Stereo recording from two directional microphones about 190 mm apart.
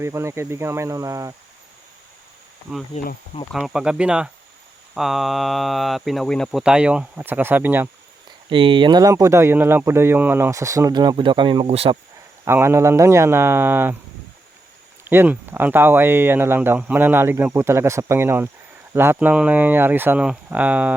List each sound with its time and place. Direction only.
0.0 s speech: 15° right (ahead or behind)
2.9 s speech: 50° left (ahead or behind)
3.5 s speech: 5° right (ahead or behind)
8.4 s speech: 25° right (ahead or behind)
12.5 s speech: 15° right (ahead or behind)
15.0 s speech: 10° right (ahead or behind)